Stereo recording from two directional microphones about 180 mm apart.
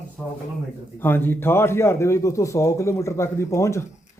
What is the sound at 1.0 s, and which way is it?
A man's voice, 10° left (ahead or behind).